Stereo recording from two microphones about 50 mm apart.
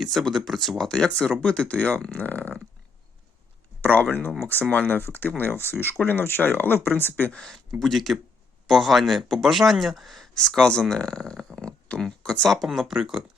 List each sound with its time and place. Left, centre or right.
0.0 s speech: centre
1.4 s speech: left
3.8 s speech: left
7.3 s speech: centre
10.3 s speech: centre
12.6 s speech: centre